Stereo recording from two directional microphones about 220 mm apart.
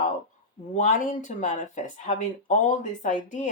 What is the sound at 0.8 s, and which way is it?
Speech, 35° left (ahead or behind).